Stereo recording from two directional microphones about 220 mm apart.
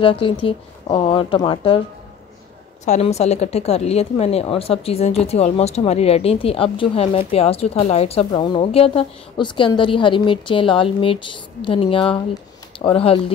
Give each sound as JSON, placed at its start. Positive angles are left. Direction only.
{"t": 0.0, "sound": "a woman's voice", "side_deg": 25}
{"t": 2.8, "sound": "a woman's voice", "side_deg": 30}